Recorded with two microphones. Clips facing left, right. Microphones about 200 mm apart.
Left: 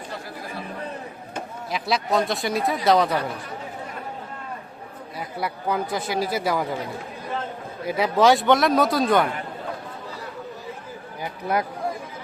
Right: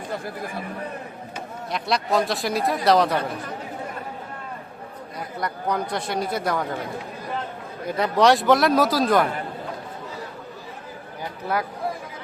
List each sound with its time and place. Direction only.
1.7 s a man's voice: centre (ahead or behind)
5.4 s a man's voice: 5° left (ahead or behind)
7.9 s a man's voice: 5° left (ahead or behind)
11.2 s speech: 20° left (ahead or behind)